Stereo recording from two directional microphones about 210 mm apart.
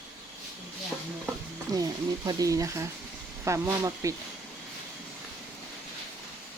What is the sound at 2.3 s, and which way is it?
Speech, 15° right (ahead or behind).